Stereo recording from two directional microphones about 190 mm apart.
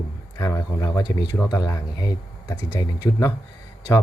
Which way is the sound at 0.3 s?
15° left (ahead or behind).